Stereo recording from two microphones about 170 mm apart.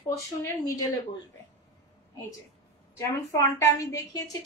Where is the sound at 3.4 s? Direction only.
20° left (ahead or behind).